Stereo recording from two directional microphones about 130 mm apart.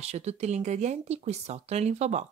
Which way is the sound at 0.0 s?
55° right (ahead or behind).